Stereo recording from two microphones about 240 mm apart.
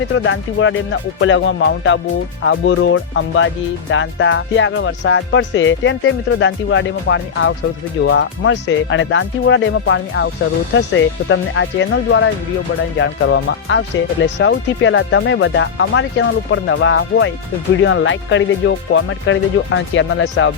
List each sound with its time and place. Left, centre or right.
0.1 s speech: left